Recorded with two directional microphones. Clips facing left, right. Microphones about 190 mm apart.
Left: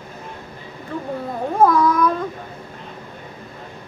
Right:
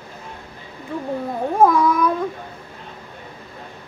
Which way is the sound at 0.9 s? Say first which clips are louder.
Right 1 dB; 15° right (ahead or behind).